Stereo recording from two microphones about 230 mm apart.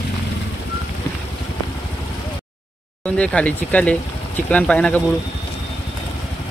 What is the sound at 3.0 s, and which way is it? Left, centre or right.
Speech, centre.